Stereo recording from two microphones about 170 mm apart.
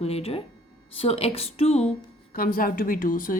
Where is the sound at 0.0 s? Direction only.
35° left (ahead or behind).